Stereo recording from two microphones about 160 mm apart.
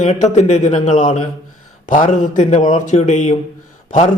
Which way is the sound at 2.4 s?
50° left (ahead or behind).